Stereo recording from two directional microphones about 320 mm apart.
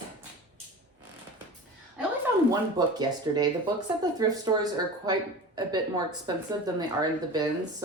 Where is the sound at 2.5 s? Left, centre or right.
Centre.